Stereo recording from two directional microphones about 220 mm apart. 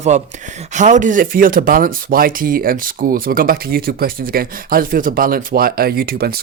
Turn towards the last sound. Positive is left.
turn(degrees=-45)  # may be behind; listen again after turning